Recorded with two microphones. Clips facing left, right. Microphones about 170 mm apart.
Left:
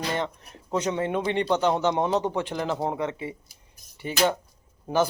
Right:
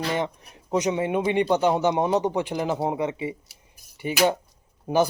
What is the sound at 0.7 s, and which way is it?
Speech, 15° right (ahead or behind).